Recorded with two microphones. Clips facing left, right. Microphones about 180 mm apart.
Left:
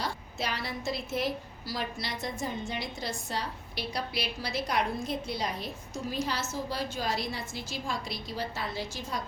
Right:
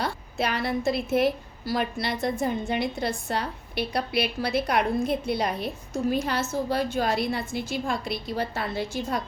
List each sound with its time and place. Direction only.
0.0 s a woman's voice: 60° right (ahead or behind)